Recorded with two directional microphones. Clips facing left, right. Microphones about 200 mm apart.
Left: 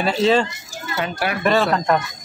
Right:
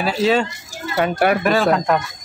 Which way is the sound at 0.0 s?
5° right (ahead or behind).